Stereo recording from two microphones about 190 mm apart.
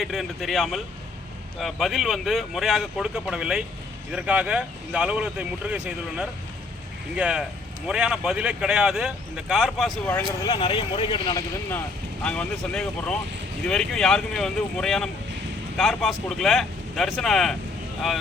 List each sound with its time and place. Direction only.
0.0 s speech: centre (ahead or behind)
10.1 s speech: 10° left (ahead or behind)
10.5 s speech: 25° left (ahead or behind)
11.7 s speech: 10° left (ahead or behind)